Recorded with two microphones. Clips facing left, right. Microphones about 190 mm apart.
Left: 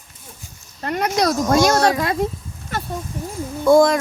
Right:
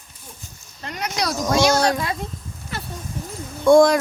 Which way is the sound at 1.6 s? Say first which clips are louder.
Even; centre (ahead or behind).